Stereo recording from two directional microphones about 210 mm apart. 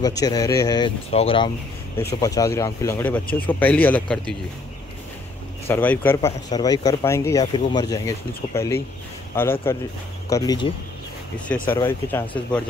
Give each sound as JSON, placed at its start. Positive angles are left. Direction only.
{"t": 0.0, "sound": "speech", "side_deg": 15}
{"t": 5.7, "sound": "speech", "side_deg": 10}
{"t": 11.3, "sound": "speech", "side_deg": 5}